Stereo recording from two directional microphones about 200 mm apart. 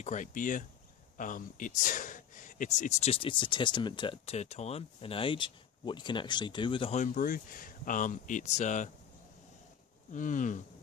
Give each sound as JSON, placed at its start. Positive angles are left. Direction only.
{"t": 0.0, "sound": "speech", "side_deg": 40}
{"t": 10.1, "sound": "speech", "side_deg": 40}